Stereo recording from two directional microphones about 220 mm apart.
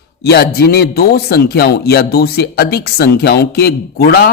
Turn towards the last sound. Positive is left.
turn(degrees=45)  # may be behind; listen again after turning